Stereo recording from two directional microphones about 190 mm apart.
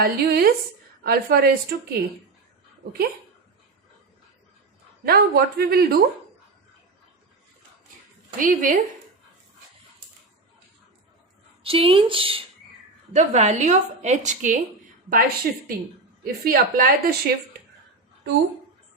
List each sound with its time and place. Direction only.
0.0 s a woman's voice: 50° right (ahead or behind)
5.0 s speech: 55° right (ahead or behind)
8.4 s a woman's voice: 45° right (ahead or behind)
11.6 s a woman's voice: 30° right (ahead or behind); by 17.3 s 55° right (ahead or behind)